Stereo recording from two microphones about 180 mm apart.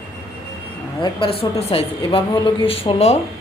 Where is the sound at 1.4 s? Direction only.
30° left (ahead or behind).